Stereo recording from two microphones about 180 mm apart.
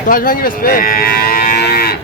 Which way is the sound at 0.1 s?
50° left (ahead or behind).